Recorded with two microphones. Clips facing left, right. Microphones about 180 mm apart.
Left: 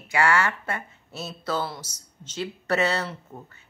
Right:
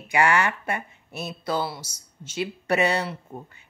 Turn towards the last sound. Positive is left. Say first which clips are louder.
# right 2 dB
turn(degrees=-15)  # may be behind; listen again after turning